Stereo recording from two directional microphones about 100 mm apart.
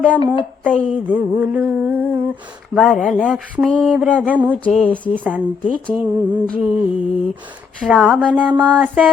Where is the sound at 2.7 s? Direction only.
5° right (ahead or behind).